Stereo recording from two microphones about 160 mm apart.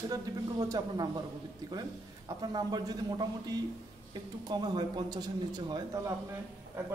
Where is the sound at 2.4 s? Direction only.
25° right (ahead or behind).